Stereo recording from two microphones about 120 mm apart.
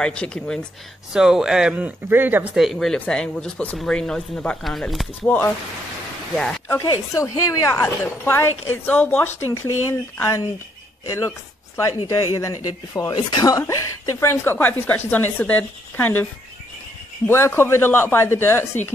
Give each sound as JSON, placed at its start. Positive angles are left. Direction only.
{"t": 0.0, "sound": "a woman's voice", "side_deg": 10}
{"t": 1.1, "sound": "speech", "side_deg": -5}
{"t": 2.5, "sound": "speech", "side_deg": 0}
{"t": 6.7, "sound": "a woman's voice", "side_deg": 25}
{"t": 9.5, "sound": "a woman's voice", "side_deg": 25}
{"t": 17.3, "sound": "speech", "side_deg": 20}